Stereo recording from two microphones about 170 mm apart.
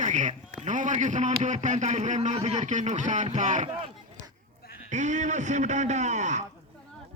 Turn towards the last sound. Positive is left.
turn(degrees=-45)  # may be behind; listen again after turning